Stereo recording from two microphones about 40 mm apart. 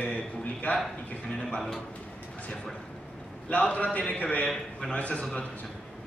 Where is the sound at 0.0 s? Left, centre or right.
Left.